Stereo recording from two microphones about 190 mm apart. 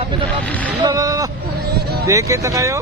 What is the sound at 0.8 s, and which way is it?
Speech, 20° right (ahead or behind).